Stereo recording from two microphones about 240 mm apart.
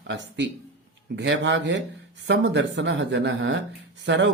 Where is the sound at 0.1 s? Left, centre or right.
Right.